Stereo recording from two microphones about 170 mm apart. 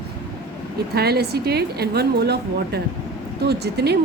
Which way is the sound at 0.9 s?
70° right (ahead or behind).